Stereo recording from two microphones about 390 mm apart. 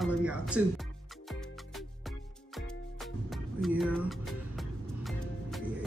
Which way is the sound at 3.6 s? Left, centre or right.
Centre.